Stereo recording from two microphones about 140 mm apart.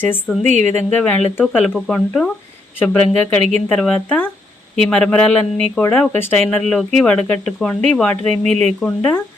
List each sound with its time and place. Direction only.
0.0 s speech: 15° left (ahead or behind)
0.4 s a woman's voice: 55° right (ahead or behind)
0.8 s speech: 15° left (ahead or behind)